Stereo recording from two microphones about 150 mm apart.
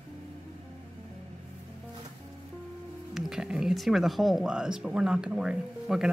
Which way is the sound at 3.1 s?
5° right (ahead or behind).